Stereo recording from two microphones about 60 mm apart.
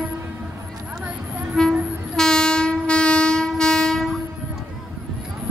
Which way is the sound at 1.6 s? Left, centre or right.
Centre.